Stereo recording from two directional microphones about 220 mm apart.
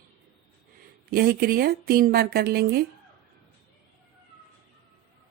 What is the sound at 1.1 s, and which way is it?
Speech, 45° right (ahead or behind).